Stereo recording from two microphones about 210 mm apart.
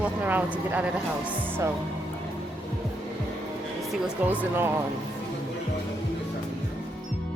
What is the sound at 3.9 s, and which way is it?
Speech, 10° right (ahead or behind).